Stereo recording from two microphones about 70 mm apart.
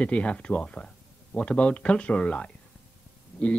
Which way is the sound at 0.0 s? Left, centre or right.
Centre.